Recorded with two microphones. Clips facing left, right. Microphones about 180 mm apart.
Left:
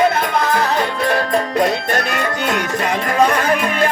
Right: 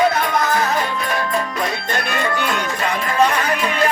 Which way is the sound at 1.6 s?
65° left (ahead or behind).